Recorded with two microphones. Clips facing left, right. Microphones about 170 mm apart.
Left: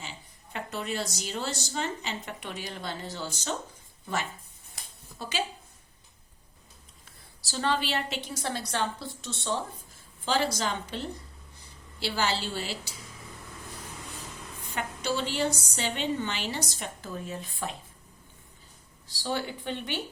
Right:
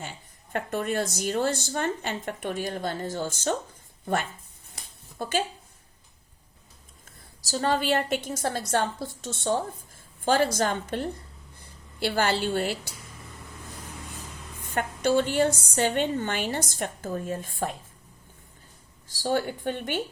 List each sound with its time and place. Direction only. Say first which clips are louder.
0.5 s a woman's voice: right 6 dB; 50° right (ahead or behind)
7.4 s speech: right 4 dB; 40° right (ahead or behind)
14.7 s speech: right 7 dB; 50° right (ahead or behind)
19.0 s speech: right 6 dB; 45° right (ahead or behind)